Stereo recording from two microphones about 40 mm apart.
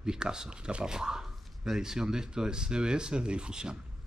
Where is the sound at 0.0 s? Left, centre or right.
Centre.